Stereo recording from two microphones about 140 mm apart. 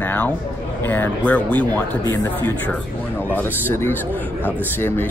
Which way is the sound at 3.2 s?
15° left (ahead or behind).